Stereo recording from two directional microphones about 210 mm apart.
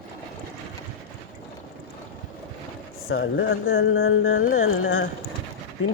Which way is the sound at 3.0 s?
55° left (ahead or behind).